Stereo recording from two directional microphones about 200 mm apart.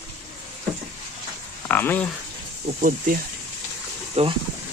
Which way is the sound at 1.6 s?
10° left (ahead or behind).